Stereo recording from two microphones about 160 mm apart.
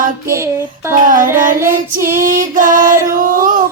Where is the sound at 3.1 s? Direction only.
55° right (ahead or behind).